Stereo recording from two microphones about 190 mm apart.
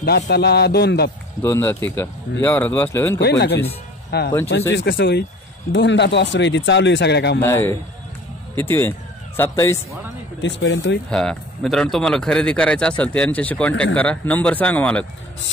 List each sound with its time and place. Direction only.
0.0 s a man's voice: 60° left (ahead or behind)
1.4 s speech: 10° left (ahead or behind)
3.2 s a man's voice: 60° left (ahead or behind)
7.4 s speech: 15° left (ahead or behind)
10.4 s speech: 80° left
11.1 s speech: 5° left (ahead or behind)